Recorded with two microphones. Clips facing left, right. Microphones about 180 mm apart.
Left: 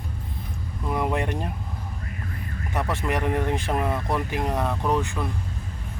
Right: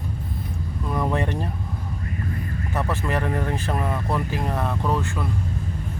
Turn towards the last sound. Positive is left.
turn(degrees=15)  # may be behind; listen again after turning